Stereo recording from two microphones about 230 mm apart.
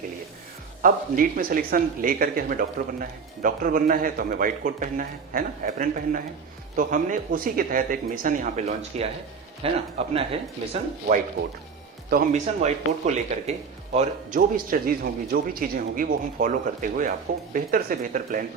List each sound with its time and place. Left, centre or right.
0.8 s speech: right
12.1 s speech: right